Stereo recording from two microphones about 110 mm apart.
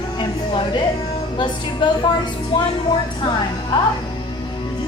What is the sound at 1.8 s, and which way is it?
Speech, 45° left (ahead or behind).